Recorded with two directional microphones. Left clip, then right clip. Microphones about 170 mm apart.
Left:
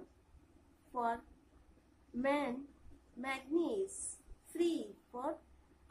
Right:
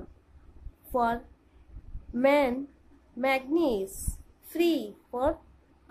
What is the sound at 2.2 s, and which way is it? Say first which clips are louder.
A woman's voice: right 12 dB; 40° right (ahead or behind).